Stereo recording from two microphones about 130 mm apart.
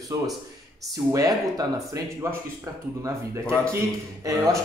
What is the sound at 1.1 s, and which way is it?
A man's voice, 25° right (ahead or behind).